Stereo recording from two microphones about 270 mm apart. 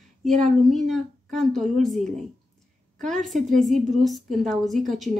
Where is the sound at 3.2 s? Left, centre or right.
Centre.